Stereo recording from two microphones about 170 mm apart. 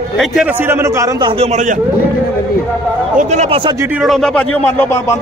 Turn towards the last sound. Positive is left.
turn(degrees=15)  # may be behind; listen again after turning